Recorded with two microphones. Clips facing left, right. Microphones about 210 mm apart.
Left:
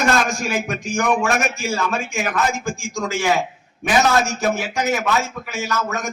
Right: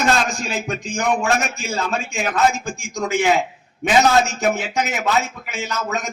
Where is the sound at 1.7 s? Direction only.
20° right (ahead or behind).